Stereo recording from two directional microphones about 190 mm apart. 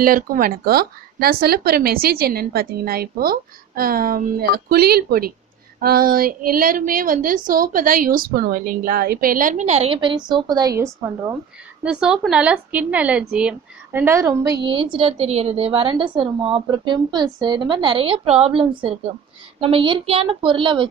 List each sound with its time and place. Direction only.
0.0 s a woman's voice: 50° right (ahead or behind); by 11.3 s 15° right (ahead or behind)
11.8 s a woman's voice: 5° right (ahead or behind); by 20.8 s 25° right (ahead or behind)